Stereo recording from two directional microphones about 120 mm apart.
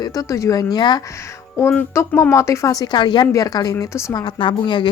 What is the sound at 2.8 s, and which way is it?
Speech, 40° left (ahead or behind).